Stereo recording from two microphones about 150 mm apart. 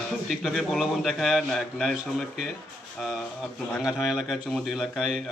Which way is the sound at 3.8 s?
5° right (ahead or behind).